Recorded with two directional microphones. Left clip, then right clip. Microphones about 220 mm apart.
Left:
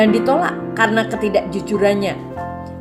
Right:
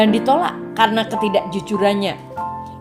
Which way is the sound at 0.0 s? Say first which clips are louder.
Left 1 dB; 40° right (ahead or behind).